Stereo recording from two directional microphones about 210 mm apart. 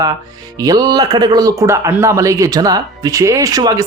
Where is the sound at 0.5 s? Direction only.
15° right (ahead or behind).